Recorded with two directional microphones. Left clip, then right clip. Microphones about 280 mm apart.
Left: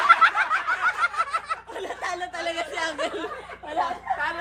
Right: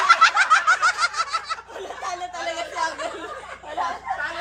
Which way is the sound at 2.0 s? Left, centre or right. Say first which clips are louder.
Right 1 dB; left.